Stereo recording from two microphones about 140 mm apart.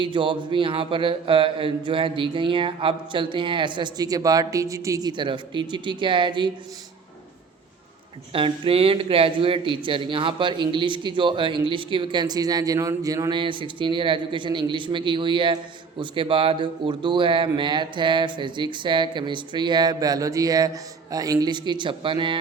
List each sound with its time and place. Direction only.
0.0 s a man's voice: 35° right (ahead or behind)
8.3 s a man's voice: 40° right (ahead or behind)